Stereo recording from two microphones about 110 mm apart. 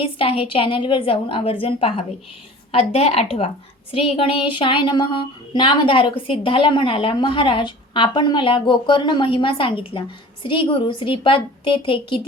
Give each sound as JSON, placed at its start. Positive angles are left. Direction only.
{"t": 0.0, "sound": "a woman's voice", "side_deg": 55}